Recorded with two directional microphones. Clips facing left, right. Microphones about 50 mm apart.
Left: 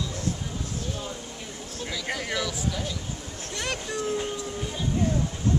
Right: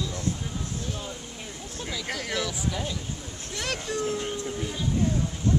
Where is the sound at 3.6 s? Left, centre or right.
Centre.